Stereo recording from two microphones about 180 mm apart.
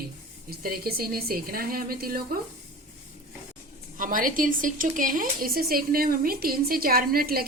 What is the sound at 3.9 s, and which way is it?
Speech, 50° right (ahead or behind).